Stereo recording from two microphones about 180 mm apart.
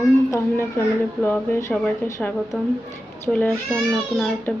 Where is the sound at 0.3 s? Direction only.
15° left (ahead or behind).